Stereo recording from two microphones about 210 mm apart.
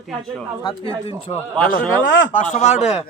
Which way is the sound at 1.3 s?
5° left (ahead or behind).